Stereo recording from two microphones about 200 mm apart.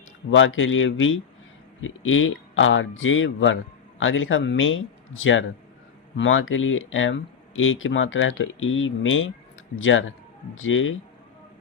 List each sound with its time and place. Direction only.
0.3 s speech: 75° left (ahead or behind)